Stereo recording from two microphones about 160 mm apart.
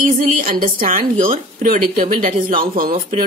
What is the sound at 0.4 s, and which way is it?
Speech, 55° right (ahead or behind).